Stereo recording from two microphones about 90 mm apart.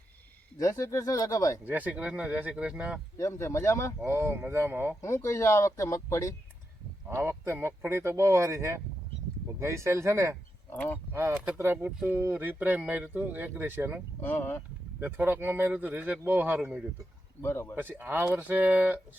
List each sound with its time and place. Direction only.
0.6 s speech: 35° left (ahead or behind)
1.6 s speech: 15° right (ahead or behind)
3.2 s speech: 30° left (ahead or behind)
4.0 s speech: 30° right (ahead or behind)
4.9 s speech: 35° left (ahead or behind)
7.1 s speech: 30° right (ahead or behind)
10.7 s speech: 20° left (ahead or behind)
11.1 s speech: 25° right (ahead or behind)
14.2 s speech: 20° left (ahead or behind)
15.0 s speech: 20° right (ahead or behind)
17.4 s speech: 25° left (ahead or behind)
17.7 s speech: 25° right (ahead or behind)